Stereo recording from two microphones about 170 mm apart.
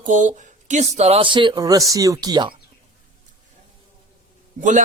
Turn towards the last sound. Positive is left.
turn(degrees=-50)  # may be behind; listen again after turning